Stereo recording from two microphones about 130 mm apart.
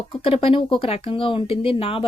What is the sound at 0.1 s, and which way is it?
Speech, 45° left (ahead or behind).